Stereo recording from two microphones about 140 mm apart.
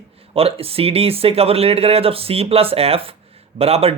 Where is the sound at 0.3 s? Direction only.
45° right (ahead or behind).